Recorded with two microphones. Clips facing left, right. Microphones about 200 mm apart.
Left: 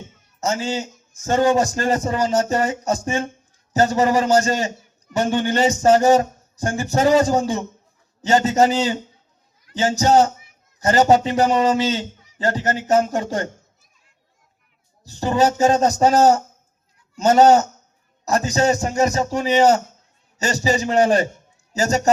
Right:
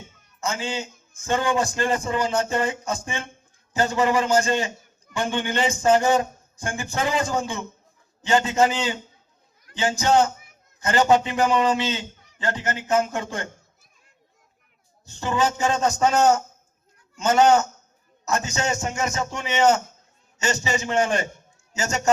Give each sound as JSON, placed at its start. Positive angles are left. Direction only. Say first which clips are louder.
{"t": 0.3, "sound": "a man's voice", "louder": "left 5 dB", "side_deg": 40}
{"t": 15.0, "sound": "a man's voice", "louder": "left 5 dB", "side_deg": 35}